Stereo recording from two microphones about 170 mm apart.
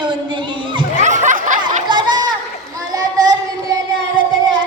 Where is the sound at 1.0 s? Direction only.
45° right (ahead or behind).